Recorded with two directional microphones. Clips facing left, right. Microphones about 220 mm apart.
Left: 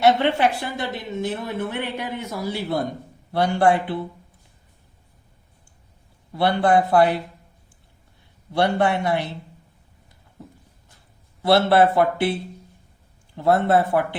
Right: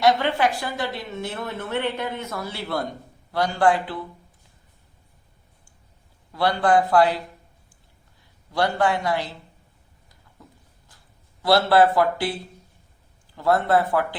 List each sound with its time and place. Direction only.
0.0 s a woman's voice: 25° left (ahead or behind)
6.3 s speech: 25° left (ahead or behind)
8.5 s speech: 25° left (ahead or behind)
11.4 s speech: 25° left (ahead or behind)